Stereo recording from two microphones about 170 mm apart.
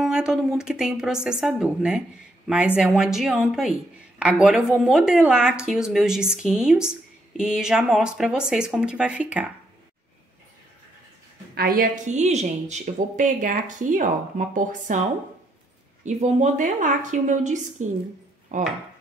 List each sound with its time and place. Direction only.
0.0 s a woman's voice: 5° right (ahead or behind)
11.5 s a woman's voice: 60° right (ahead or behind)
12.1 s speech: 45° right (ahead or behind)
16.0 s speech: 45° right (ahead or behind)